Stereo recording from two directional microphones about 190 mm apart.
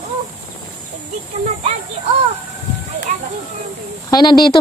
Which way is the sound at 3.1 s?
40° right (ahead or behind).